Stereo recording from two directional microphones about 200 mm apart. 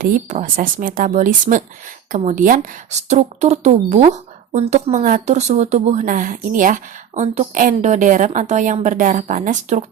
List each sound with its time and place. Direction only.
0.0 s speech: 40° right (ahead or behind)